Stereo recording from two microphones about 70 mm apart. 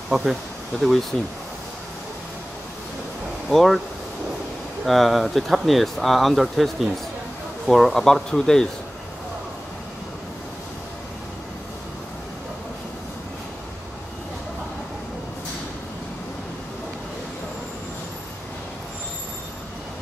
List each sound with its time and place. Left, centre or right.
0.1 s speech: centre
3.4 s speech: centre
4.8 s speech: centre